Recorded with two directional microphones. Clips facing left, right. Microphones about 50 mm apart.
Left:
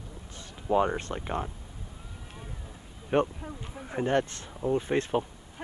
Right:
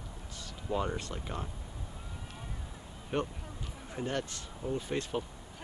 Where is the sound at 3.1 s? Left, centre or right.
Left.